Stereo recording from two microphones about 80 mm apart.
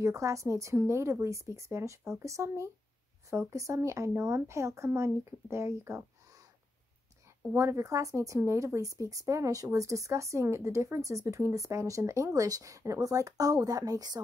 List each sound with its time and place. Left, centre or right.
0.0 s speech: right
7.5 s speech: right